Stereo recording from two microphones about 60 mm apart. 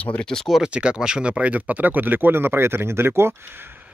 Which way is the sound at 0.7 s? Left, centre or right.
Centre.